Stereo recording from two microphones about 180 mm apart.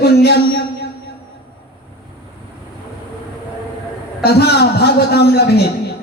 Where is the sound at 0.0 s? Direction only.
65° left (ahead or behind).